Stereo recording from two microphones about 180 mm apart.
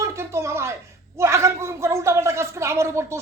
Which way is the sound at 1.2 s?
15° right (ahead or behind).